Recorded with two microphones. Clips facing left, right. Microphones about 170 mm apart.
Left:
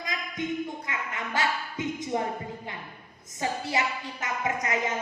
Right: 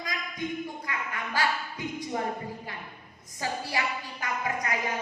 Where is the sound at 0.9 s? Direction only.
20° left (ahead or behind).